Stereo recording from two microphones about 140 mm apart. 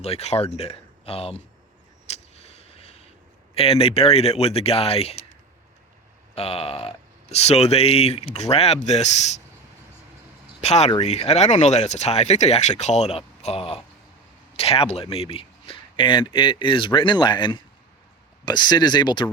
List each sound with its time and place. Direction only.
0.0 s speech: 45° left (ahead or behind)
2.0 s a sound: 45° left (ahead or behind)
3.5 s speech: 45° left (ahead or behind)
6.3 s speech: 45° left (ahead or behind)
10.6 s speech: 50° left (ahead or behind); by 19.3 s 35° left (ahead or behind)